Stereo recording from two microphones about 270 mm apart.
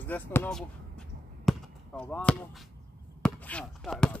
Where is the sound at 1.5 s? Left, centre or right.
Centre.